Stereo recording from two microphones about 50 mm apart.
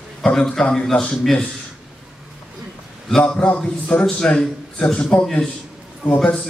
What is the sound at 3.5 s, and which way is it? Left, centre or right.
A man's voice, left.